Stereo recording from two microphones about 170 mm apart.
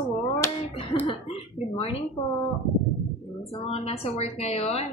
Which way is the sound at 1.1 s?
35° left (ahead or behind).